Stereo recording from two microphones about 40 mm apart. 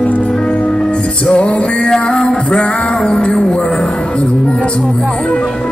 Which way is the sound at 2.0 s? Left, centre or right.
Left.